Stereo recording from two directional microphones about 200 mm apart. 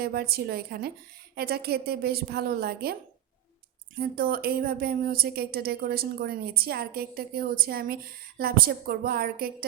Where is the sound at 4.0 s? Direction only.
45° right (ahead or behind).